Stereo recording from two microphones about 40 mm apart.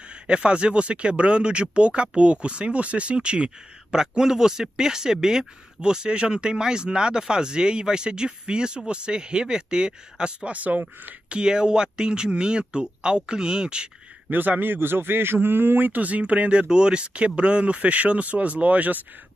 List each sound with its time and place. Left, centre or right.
0.1 s speech: right
10.5 s speech: right
11.2 s speech: right
14.6 s a man's voice: right
16.1 s speech: right